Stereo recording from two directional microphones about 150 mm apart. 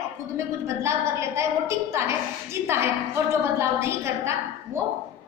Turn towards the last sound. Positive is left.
turn(degrees=-15)  # may be behind; listen again after turning